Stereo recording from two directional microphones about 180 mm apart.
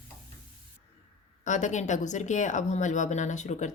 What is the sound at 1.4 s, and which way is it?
Speech, 40° left (ahead or behind).